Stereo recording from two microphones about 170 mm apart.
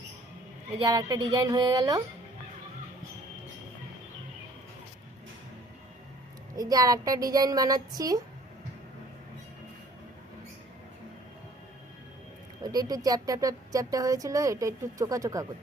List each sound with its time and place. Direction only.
0.8 s a woman's voice: 25° right (ahead or behind)
6.6 s a woman's voice: 20° right (ahead or behind)
12.6 s a woman's voice: 25° right (ahead or behind)